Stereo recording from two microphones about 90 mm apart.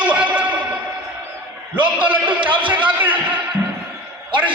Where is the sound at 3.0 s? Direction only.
20° right (ahead or behind).